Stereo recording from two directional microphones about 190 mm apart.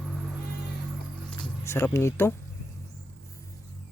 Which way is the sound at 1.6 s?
15° left (ahead or behind).